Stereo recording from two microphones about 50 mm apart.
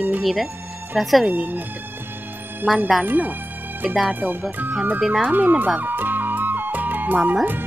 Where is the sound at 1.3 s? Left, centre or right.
Right.